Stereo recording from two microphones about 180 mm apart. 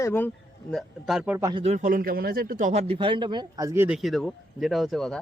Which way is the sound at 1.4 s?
20° right (ahead or behind).